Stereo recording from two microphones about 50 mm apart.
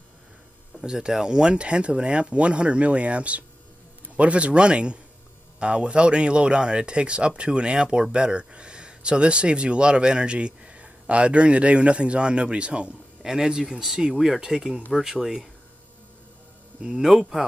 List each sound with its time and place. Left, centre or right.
0.7 s speech: centre
16.8 s speech: centre